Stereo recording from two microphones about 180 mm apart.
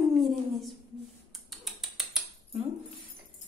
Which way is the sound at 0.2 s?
Centre (ahead or behind).